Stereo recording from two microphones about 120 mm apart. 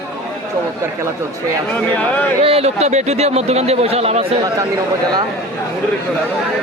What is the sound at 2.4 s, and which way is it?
A man's voice, 55° right (ahead or behind).